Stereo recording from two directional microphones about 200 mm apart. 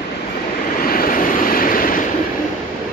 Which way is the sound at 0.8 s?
45° left (ahead or behind).